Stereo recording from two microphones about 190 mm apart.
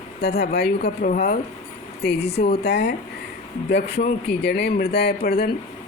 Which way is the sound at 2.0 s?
60° left (ahead or behind).